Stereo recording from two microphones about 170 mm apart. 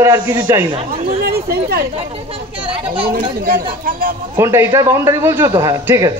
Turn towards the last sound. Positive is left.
turn(degrees=-20)  # may be behind; listen again after turning